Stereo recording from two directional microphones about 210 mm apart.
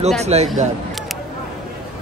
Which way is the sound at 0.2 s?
30° right (ahead or behind).